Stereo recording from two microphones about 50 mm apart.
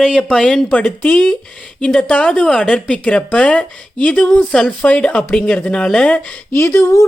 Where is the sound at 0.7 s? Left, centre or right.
Left.